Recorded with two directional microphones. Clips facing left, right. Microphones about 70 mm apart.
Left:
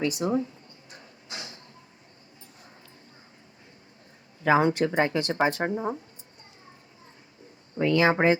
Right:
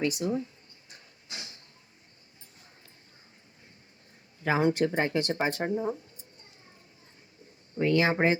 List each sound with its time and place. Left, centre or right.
0.0 s speech: left
4.4 s speech: left
7.8 s speech: left